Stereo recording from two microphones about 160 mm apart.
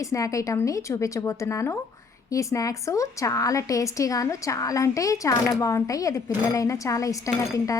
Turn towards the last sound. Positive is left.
turn(degrees=20)  # may be behind; listen again after turning